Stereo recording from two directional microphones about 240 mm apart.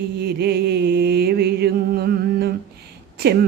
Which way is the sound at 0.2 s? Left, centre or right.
Right.